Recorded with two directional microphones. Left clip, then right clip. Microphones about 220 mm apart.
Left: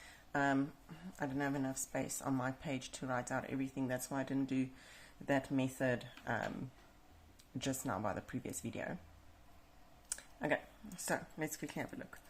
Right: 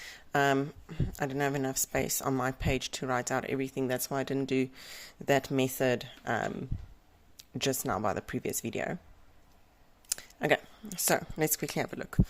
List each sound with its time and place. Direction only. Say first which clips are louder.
0.0 s speech: right 8 dB; 45° right (ahead or behind)
10.1 s speech: right 9 dB; 45° right (ahead or behind)